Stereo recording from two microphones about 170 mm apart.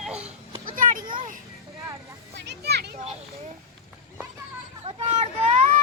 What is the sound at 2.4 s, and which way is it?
Children playing, 75° right (ahead or behind).